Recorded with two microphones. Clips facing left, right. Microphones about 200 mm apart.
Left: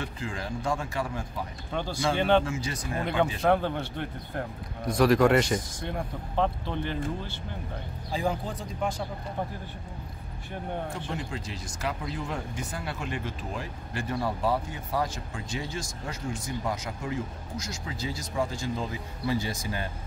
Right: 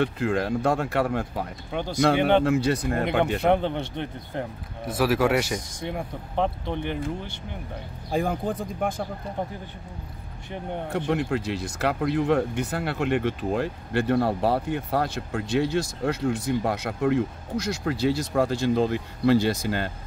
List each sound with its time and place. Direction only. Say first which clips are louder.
0.0 s speech: right 11 dB; 65° right (ahead or behind)
3.4 s speech: right 3 dB; 20° right (ahead or behind)
4.8 s speech: left 1 dB; 5° right (ahead or behind)
5.9 s speech: right 5 dB; 15° right (ahead or behind)
8.1 s speech: right 4 dB; 55° right (ahead or behind)
10.9 s speech: right 10 dB; 65° right (ahead or behind)